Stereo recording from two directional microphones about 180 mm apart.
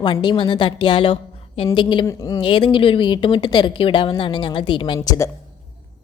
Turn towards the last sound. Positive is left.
turn(degrees=15)  # may be behind; listen again after turning